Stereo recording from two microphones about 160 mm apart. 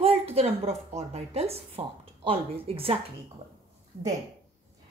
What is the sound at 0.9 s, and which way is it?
Speech, 40° right (ahead or behind).